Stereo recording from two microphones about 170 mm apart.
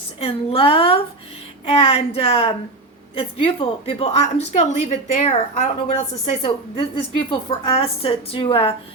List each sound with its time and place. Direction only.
0.2 s a woman's voice: 35° left (ahead or behind)
6.4 s a woman's voice: 30° left (ahead or behind)